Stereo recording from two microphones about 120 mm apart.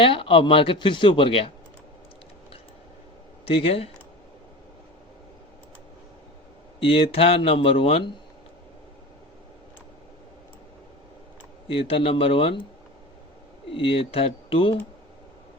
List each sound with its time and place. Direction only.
0.0 s speech: 45° left (ahead or behind)
3.4 s speech: 55° left (ahead or behind)
6.7 s speech: 50° left (ahead or behind)
11.7 s speech: 50° left (ahead or behind)
13.7 s speech: 50° left (ahead or behind)